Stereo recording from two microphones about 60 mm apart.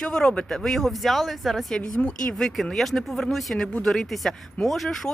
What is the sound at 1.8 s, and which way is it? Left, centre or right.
Speech, left.